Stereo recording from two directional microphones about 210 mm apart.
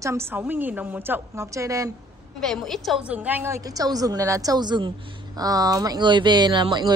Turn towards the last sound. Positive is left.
turn(degrees=-20)  # may be behind; listen again after turning